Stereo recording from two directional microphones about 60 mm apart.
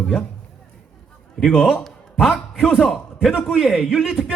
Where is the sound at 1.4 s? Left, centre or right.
Centre.